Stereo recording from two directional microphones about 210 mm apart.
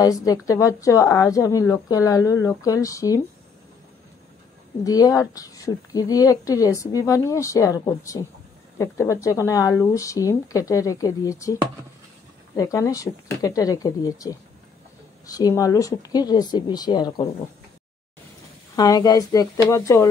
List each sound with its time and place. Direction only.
0.0 s a woman's voice: 15° left (ahead or behind)
4.8 s a woman's voice: 15° left (ahead or behind)
12.5 s a woman's voice: 15° left (ahead or behind)
18.8 s a woman's voice: 20° left (ahead or behind)